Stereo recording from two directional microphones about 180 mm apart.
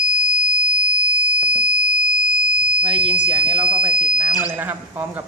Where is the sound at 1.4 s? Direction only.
5° right (ahead or behind).